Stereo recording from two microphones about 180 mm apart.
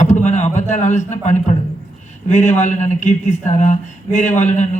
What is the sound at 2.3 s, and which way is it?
Speech, 40° left (ahead or behind).